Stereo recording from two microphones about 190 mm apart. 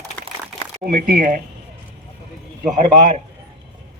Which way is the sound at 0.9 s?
45° right (ahead or behind).